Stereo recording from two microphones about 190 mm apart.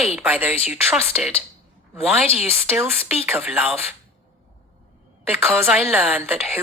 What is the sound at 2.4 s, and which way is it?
A woman's voice, 10° right (ahead or behind).